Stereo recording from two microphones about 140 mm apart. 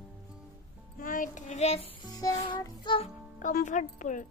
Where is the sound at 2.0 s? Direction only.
25° left (ahead or behind).